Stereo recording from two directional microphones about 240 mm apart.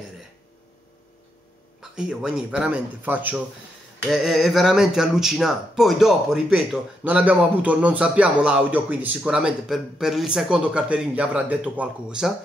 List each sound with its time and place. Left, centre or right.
1.8 s speech: centre